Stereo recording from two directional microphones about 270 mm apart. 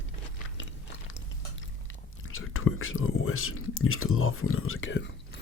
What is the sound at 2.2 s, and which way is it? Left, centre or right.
Whispering, left.